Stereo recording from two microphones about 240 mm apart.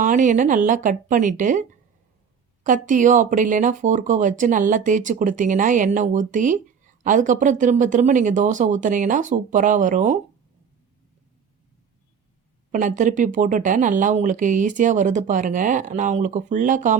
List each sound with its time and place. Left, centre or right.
0.0 s speech: right
2.6 s speech: right
12.7 s speech: right